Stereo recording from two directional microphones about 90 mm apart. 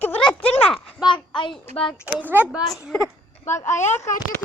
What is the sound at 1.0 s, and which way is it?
Speech, 65° left (ahead or behind).